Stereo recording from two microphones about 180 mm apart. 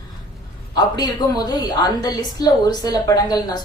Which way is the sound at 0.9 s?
20° left (ahead or behind).